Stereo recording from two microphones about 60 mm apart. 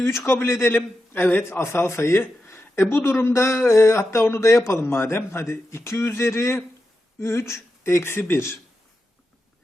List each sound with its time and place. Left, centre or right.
0.0 s a man's voice: left
1.1 s a man's voice: left